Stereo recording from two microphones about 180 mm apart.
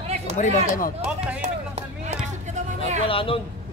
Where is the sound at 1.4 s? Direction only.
35° right (ahead or behind).